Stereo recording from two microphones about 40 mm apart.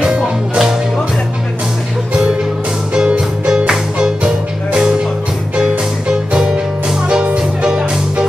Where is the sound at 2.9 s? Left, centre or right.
Right.